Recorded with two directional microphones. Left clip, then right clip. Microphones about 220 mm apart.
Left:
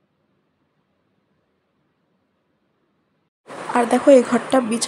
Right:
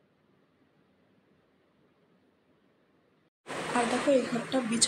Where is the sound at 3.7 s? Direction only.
25° left (ahead or behind).